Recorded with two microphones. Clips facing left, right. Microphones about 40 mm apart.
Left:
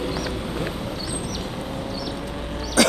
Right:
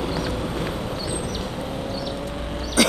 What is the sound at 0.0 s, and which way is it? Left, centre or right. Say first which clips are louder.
Vehicle: right 1 dB; right.